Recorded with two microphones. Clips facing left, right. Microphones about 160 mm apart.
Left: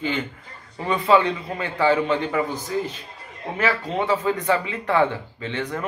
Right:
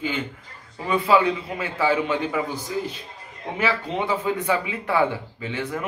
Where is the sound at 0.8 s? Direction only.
5° right (ahead or behind).